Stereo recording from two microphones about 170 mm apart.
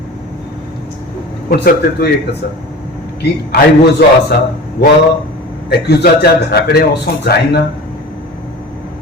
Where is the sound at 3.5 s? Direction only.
70° left (ahead or behind).